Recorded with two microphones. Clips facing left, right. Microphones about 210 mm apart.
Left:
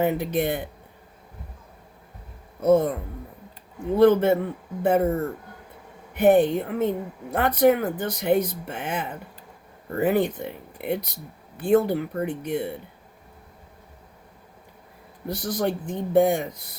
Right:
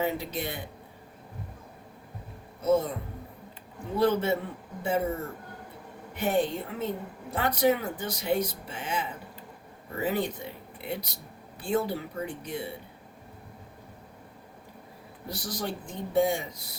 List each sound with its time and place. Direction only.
0.0 s speech: 55° left (ahead or behind)
2.6 s speech: 55° left (ahead or behind)
3.9 s speech: 55° left (ahead or behind)
6.1 s speech: 55° left (ahead or behind)
15.3 s speech: 55° left (ahead or behind)